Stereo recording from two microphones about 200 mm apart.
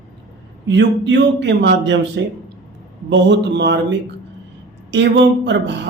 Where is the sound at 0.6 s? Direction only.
65° right (ahead or behind).